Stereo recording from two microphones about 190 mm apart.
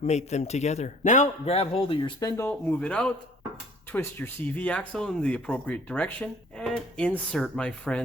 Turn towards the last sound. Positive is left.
turn(degrees=5)  # may be behind; listen again after turning